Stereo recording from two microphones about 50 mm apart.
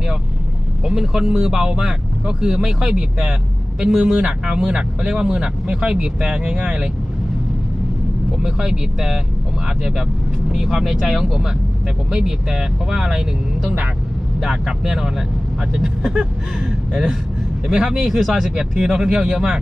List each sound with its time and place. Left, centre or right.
0.8 s speech: centre
8.4 s speech: centre
10.5 s speech: centre
14.4 s speech: centre
17.9 s speech: centre